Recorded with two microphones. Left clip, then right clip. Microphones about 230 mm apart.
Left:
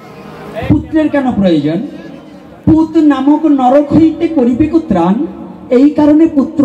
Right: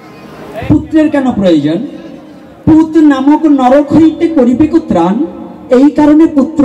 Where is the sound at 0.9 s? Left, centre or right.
Right.